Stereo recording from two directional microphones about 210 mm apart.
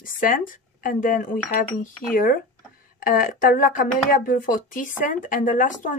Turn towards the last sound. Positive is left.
turn(degrees=40)  # may be behind; listen again after turning